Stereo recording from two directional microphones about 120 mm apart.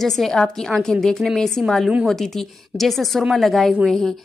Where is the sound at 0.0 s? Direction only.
Centre (ahead or behind).